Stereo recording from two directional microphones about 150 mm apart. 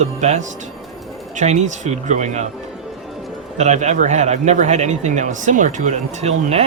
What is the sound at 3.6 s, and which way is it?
Speech, 50° right (ahead or behind).